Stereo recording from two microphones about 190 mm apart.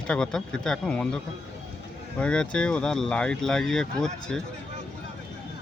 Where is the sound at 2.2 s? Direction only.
5° left (ahead or behind).